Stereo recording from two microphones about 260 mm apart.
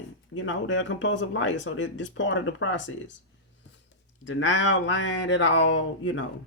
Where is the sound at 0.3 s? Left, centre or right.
Left.